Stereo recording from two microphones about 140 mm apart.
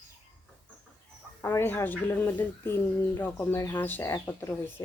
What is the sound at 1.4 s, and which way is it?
Speech, 15° left (ahead or behind).